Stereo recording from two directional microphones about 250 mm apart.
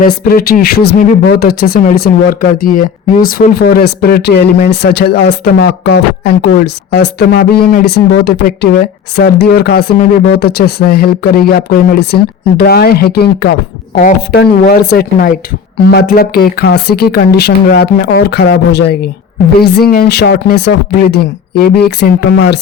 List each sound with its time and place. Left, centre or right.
0.0 s speech: left